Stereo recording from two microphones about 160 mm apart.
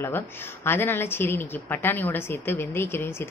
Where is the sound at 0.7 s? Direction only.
15° left (ahead or behind).